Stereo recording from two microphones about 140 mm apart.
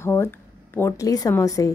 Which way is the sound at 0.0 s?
20° left (ahead or behind).